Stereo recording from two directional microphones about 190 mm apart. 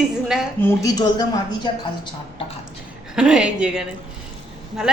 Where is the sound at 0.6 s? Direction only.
15° left (ahead or behind).